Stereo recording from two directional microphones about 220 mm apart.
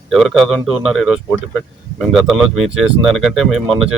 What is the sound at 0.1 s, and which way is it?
A man's voice, centre (ahead or behind).